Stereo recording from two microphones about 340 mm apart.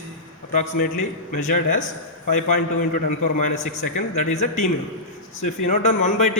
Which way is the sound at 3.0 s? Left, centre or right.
Left.